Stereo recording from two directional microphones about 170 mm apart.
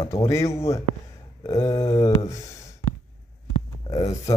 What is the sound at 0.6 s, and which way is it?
A man's voice, 15° left (ahead or behind).